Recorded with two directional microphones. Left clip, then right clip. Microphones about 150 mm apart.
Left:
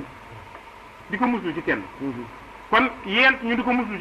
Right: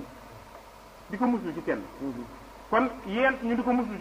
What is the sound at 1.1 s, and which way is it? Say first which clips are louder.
A man's voice: left 5 dB; 40° right (ahead or behind).